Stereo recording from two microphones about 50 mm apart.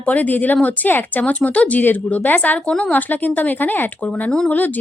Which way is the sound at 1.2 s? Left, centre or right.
Left.